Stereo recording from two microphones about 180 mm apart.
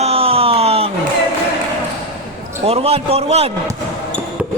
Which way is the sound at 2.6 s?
35° right (ahead or behind).